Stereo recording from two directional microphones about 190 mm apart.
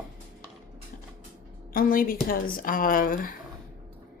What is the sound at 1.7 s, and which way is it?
Speech, 50° left (ahead or behind).